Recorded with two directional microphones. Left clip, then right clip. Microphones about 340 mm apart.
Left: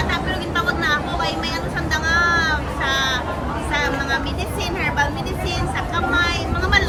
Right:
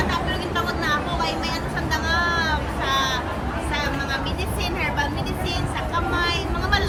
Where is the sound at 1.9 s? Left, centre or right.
Centre.